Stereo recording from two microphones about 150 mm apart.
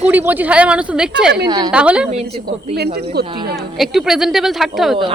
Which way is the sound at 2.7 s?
90° right.